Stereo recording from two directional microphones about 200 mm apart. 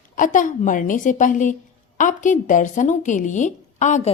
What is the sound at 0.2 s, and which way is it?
Speech, 40° left (ahead or behind).